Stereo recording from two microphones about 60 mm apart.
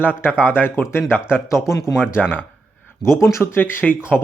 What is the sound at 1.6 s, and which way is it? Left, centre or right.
Speech, left.